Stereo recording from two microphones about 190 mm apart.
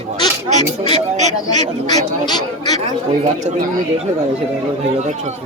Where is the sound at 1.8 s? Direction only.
20° left (ahead or behind).